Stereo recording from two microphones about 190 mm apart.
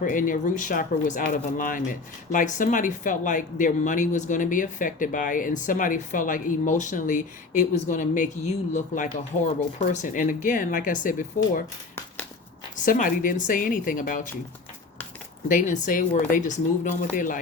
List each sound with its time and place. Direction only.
0.0 s speech: 45° left (ahead or behind)
12.7 s speech: 45° left (ahead or behind)
15.4 s speech: 45° left (ahead or behind)